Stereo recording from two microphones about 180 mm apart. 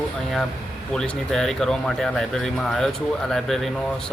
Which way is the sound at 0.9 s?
5° left (ahead or behind).